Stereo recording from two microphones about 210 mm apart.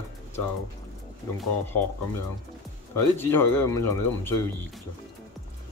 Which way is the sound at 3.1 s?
10° left (ahead or behind).